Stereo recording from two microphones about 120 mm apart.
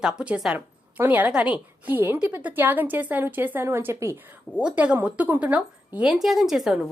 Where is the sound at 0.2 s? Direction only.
5° right (ahead or behind).